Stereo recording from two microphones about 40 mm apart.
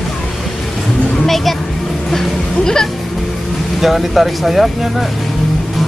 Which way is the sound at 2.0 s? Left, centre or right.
Centre.